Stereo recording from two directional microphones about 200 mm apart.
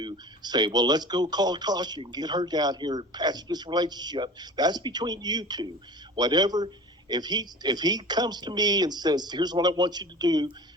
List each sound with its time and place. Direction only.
0.0 s speech: 20° right (ahead or behind)